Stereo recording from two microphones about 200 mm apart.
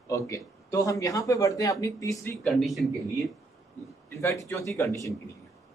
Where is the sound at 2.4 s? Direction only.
Centre (ahead or behind).